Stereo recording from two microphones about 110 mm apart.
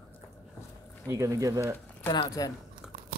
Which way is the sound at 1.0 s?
30° right (ahead or behind).